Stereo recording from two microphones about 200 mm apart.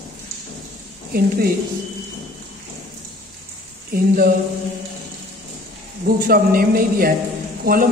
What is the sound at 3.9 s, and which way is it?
Speech, 50° right (ahead or behind).